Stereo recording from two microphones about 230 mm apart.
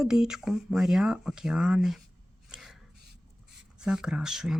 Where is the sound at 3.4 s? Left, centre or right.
Centre.